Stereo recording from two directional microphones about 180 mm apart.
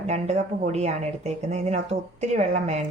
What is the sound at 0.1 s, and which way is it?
Speech, 40° right (ahead or behind).